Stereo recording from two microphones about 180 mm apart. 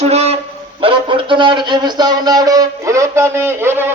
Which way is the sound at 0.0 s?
35° right (ahead or behind).